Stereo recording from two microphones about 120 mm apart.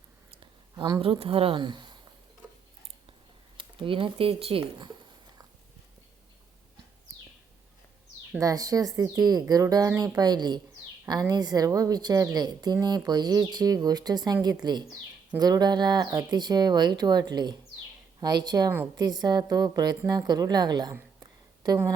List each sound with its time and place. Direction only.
0.3 s speech: 45° right (ahead or behind)
3.6 s speech: 45° right (ahead or behind)
8.4 s a woman's voice: 30° right (ahead or behind)
21.2 s a sound: 35° right (ahead or behind)